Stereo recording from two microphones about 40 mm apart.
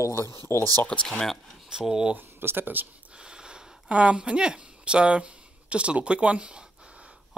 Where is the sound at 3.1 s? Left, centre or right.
Right.